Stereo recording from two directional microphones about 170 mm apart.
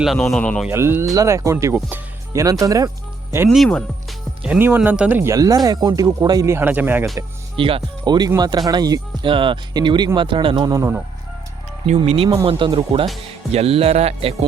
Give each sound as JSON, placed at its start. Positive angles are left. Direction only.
{"t": 0.0, "sound": "speech", "side_deg": 0}
{"t": 0.7, "sound": "speech", "side_deg": -15}
{"t": 3.5, "sound": "speech", "side_deg": 5}
{"t": 4.4, "sound": "speech", "side_deg": -10}
{"t": 7.5, "sound": "speech", "side_deg": -30}
{"t": 11.9, "sound": "speech", "side_deg": -35}